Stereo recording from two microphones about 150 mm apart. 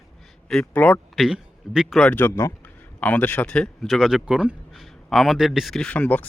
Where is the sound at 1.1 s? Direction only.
5° right (ahead or behind).